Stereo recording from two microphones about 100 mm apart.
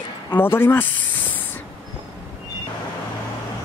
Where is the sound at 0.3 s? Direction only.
20° left (ahead or behind).